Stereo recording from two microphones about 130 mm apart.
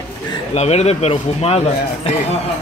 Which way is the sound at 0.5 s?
60° left (ahead or behind).